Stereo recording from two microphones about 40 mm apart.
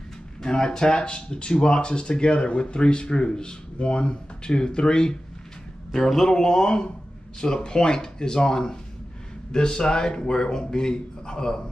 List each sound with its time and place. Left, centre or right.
0.4 s speech: centre
5.9 s speech: centre